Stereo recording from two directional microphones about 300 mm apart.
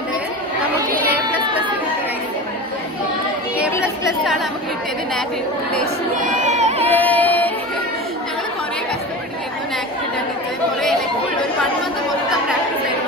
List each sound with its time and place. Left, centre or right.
1.1 s a sound: centre
6.3 s music: right
6.9 s music: centre